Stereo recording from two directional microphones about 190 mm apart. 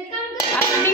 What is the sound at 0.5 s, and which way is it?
Music, 10° left (ahead or behind).